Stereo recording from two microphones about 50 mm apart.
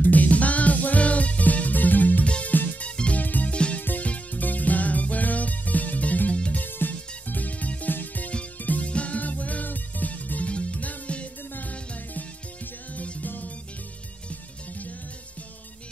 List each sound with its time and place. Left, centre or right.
0.0 s music: left
2.2 s music: left
2.5 s music: left
2.8 s music: left
3.5 s music: left